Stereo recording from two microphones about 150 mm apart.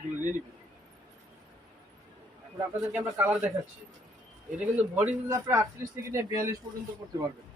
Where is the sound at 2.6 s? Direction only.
15° right (ahead or behind).